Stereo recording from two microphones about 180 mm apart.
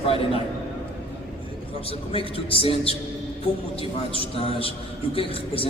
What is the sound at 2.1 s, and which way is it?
A man's voice, 30° left (ahead or behind).